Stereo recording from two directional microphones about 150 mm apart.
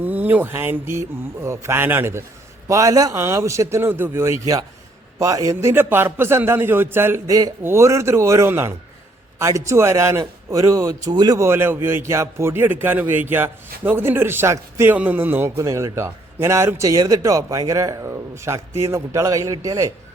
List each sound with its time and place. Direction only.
0.0 s a man's voice: 10° right (ahead or behind)